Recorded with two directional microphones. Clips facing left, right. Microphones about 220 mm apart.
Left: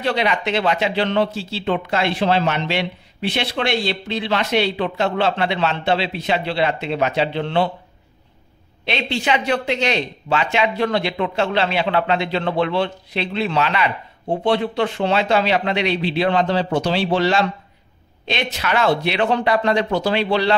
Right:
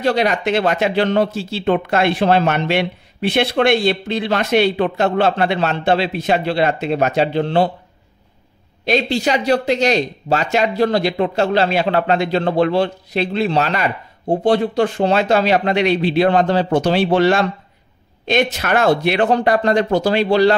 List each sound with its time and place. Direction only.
0.0 s a man's voice: 45° right (ahead or behind)
8.8 s a man's voice: 40° right (ahead or behind)